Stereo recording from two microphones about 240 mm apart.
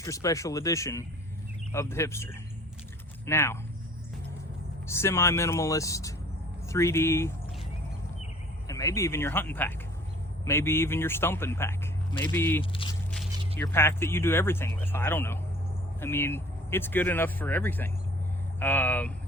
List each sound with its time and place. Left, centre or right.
0.0 s speech: centre
4.9 s speech: centre
8.6 s speech: centre
12.7 s speech: left
13.7 s speech: centre